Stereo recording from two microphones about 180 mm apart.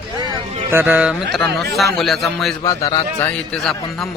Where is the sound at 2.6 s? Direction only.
25° left (ahead or behind).